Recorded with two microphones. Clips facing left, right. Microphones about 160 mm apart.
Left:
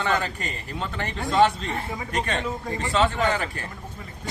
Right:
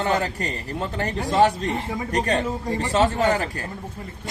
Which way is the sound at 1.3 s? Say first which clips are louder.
Right 1 dB; 40° right (ahead or behind).